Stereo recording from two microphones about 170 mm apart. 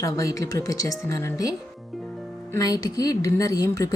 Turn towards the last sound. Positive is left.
turn(degrees=20)  # may be behind; listen again after turning